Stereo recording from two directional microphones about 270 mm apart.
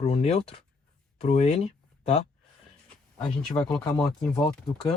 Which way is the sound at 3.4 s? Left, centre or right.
Centre.